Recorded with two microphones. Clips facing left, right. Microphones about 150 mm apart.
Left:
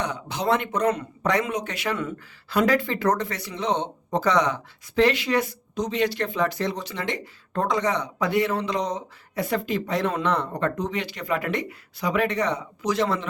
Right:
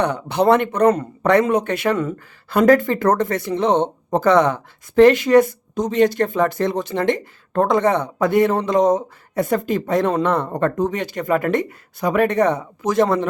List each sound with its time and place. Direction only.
0.0 s speech: 60° right (ahead or behind)